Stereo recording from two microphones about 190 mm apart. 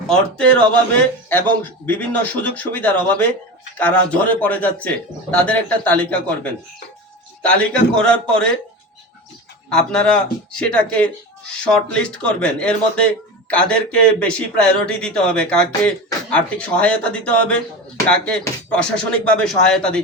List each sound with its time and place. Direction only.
0.1 s a man's voice: 5° left (ahead or behind)
9.6 s a man's voice: 5° left (ahead or behind)